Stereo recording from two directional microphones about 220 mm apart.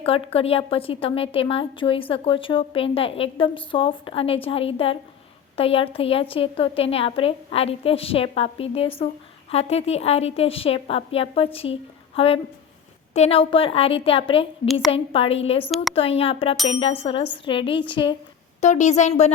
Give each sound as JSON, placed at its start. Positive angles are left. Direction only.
{"t": 0.0, "sound": "a woman's voice", "side_deg": 25}
{"t": 15.6, "sound": "a woman's voice", "side_deg": 0}
{"t": 16.0, "sound": "a woman's voice", "side_deg": 25}
{"t": 18.6, "sound": "a woman's voice", "side_deg": 30}